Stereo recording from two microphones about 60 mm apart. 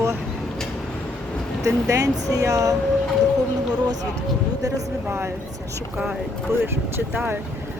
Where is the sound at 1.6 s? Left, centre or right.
Right.